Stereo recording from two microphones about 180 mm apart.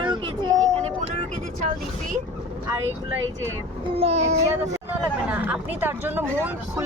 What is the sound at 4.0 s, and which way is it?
Speech, 35° right (ahead or behind).